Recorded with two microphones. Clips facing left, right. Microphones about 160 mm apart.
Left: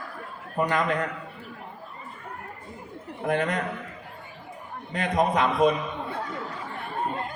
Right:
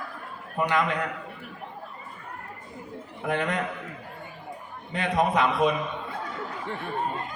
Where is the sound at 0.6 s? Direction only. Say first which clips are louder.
Even; 40° left (ahead or behind).